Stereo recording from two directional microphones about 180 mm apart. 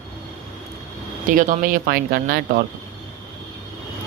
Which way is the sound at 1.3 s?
45° right (ahead or behind).